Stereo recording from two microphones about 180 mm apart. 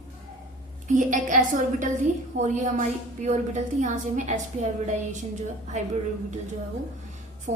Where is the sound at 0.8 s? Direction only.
45° right (ahead or behind).